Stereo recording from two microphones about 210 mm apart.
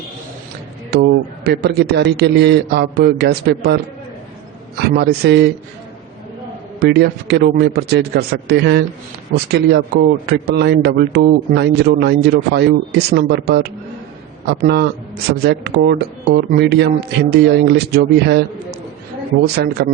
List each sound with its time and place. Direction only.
1.5 s a man's voice: 50° right (ahead or behind)
4.8 s a man's voice: 50° right (ahead or behind)
6.7 s a man's voice: 50° right (ahead or behind)